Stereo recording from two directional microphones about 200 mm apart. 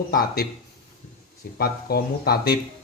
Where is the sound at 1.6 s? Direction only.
50° left (ahead or behind).